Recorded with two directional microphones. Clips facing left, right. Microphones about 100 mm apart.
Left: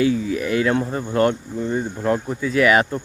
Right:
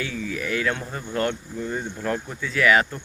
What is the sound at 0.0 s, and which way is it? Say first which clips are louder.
Speech: left 10 dB; 30° left (ahead or behind).